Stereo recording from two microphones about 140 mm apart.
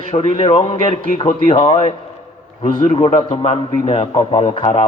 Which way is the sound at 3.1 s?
50° left (ahead or behind).